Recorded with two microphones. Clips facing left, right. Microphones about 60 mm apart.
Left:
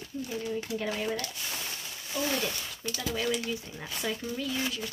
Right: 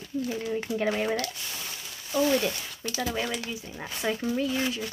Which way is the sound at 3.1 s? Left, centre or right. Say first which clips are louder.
Left 1 dB; right.